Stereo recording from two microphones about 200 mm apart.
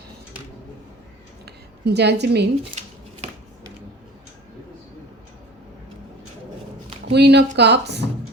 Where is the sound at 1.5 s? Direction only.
55° right (ahead or behind).